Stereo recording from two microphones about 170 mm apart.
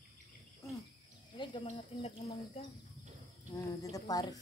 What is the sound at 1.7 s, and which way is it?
Speech, 35° left (ahead or behind).